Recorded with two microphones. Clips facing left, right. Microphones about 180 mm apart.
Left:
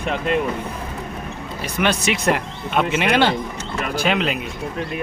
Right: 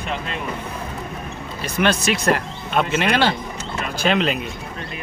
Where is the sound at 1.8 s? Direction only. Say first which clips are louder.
Right 1 dB; 20° left (ahead or behind).